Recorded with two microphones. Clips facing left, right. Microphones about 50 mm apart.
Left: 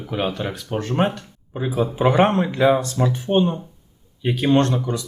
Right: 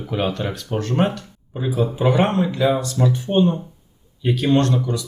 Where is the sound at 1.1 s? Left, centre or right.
Left.